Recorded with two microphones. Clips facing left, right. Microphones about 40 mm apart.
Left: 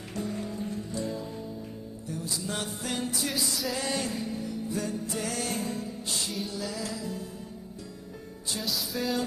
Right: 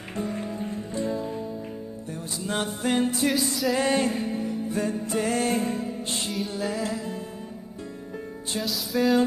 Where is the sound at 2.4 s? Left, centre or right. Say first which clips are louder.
Right 6 dB; right.